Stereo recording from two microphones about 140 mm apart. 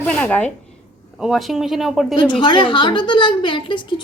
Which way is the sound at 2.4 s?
35° left (ahead or behind).